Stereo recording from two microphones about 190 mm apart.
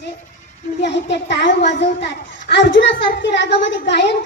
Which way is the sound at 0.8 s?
65° left (ahead or behind).